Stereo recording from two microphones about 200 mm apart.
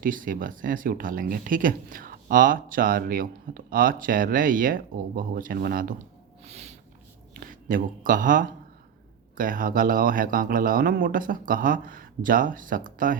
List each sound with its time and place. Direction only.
0.0 s speech: 45° right (ahead or behind)
6.4 s snort: 35° right (ahead or behind)
7.3 s speech: 45° right (ahead or behind)